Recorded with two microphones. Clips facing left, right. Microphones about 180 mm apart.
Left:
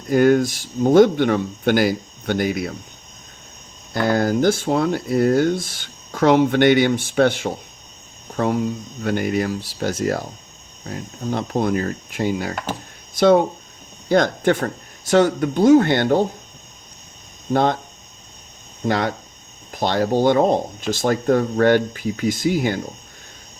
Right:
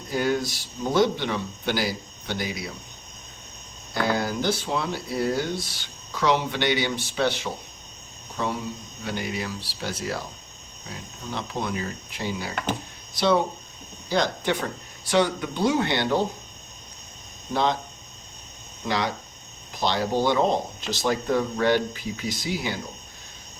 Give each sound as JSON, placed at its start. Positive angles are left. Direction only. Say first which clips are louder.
{"t": 0.1, "sound": "speech", "louder": "left 10 dB", "side_deg": 50}
{"t": 4.0, "sound": "speech", "louder": "left 8 dB", "side_deg": 50}
{"t": 17.5, "sound": "speech", "louder": "left 6 dB", "side_deg": 50}
{"t": 18.9, "sound": "speech", "louder": "left 6 dB", "side_deg": 50}